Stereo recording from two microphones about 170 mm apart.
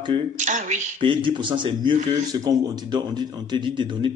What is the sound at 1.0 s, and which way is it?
A man's voice, 30° right (ahead or behind).